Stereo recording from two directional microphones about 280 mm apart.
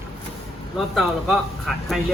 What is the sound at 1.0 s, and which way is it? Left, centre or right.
Speech, centre.